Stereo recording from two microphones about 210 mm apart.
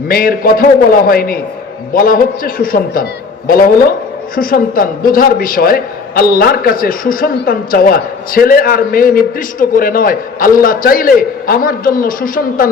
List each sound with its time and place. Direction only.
0.1 s a man's voice: 45° left (ahead or behind)